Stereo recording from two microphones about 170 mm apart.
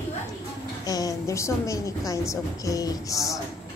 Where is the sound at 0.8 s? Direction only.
20° left (ahead or behind).